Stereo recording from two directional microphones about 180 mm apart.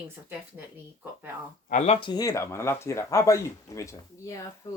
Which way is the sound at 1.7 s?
40° left (ahead or behind).